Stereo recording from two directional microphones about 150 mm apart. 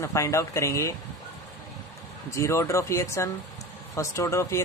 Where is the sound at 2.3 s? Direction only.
20° left (ahead or behind).